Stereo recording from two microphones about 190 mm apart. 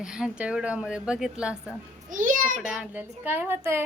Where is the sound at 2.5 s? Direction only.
5° right (ahead or behind).